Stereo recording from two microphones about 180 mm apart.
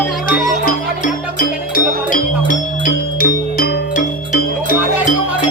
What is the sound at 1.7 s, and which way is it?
Music, 50° left (ahead or behind).